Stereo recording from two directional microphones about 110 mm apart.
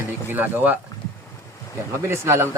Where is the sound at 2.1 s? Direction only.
25° right (ahead or behind).